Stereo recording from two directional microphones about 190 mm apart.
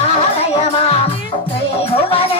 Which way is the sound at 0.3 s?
30° left (ahead or behind).